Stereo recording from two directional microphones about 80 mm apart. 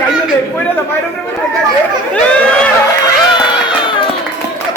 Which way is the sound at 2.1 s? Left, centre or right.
Centre.